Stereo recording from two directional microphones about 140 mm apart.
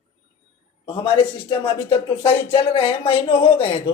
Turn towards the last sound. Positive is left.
turn(degrees=40)  # may be behind; listen again after turning